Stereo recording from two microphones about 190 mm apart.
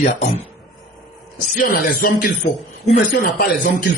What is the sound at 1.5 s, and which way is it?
Speech, 50° left (ahead or behind).